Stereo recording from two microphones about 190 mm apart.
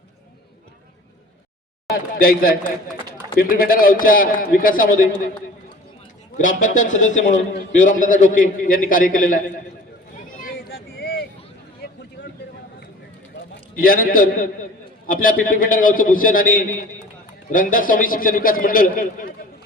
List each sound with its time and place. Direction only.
1.9 s a man's voice: 50° left (ahead or behind)
6.3 s a man's voice: 45° left (ahead or behind)
10.4 s a sound: 55° left (ahead or behind)
11.8 s vehicle: 60° left (ahead or behind)
13.7 s a man's voice: 50° left (ahead or behind)